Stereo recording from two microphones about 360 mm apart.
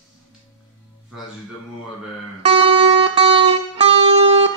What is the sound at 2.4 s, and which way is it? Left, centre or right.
Music, centre.